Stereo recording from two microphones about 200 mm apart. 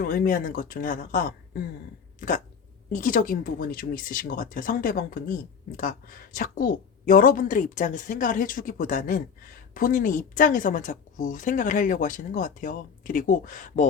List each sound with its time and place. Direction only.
0.0 s a woman's voice: 45° left (ahead or behind)
2.9 s a woman's voice: 40° left (ahead or behind)